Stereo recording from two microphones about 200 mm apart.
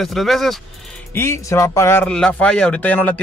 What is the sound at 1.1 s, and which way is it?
Speech, 15° left (ahead or behind).